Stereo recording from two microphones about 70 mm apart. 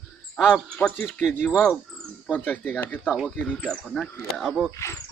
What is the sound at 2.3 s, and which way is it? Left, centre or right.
Speech, left.